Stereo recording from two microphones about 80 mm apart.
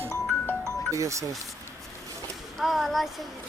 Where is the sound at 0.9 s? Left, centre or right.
Right.